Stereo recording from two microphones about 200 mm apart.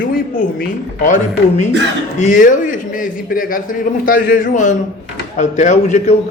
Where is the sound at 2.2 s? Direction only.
40° left (ahead or behind).